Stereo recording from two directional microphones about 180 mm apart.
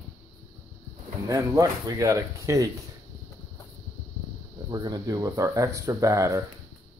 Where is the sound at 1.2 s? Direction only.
20° right (ahead or behind).